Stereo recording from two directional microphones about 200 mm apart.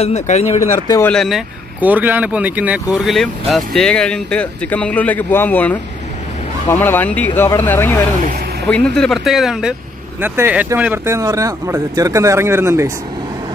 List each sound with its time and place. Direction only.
0.0 s speech: 35° left (ahead or behind)
0.6 s speech: 15° left (ahead or behind)
1.1 s speech: centre (ahead or behind)